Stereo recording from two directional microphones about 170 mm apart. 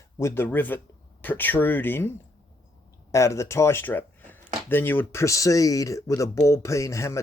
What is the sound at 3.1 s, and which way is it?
Speech, 15° left (ahead or behind).